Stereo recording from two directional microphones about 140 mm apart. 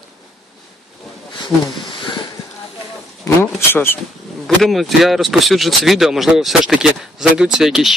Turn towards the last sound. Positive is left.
turn(degrees=-5)  # may be behind; listen again after turning